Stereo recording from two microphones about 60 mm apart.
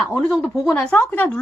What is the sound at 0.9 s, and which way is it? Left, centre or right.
Speech, left.